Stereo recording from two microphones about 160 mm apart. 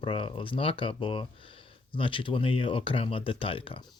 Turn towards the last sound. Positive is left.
turn(degrees=35)  # may be behind; listen again after turning